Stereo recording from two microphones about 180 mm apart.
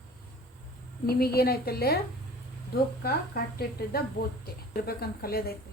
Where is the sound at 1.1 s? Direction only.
60° left (ahead or behind).